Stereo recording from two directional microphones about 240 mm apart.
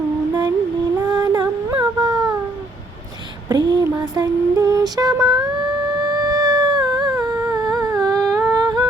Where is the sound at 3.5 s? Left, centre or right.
Centre.